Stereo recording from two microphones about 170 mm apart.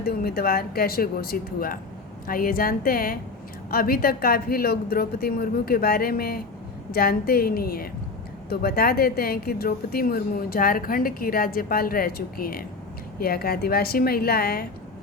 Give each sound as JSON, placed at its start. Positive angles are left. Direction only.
{"t": 0.0, "sound": "a woman's voice", "side_deg": 65}